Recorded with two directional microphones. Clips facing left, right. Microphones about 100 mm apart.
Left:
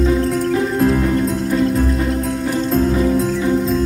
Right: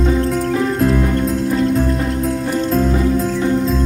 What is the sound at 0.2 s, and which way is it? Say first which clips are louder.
Music: even; centre (ahead or behind).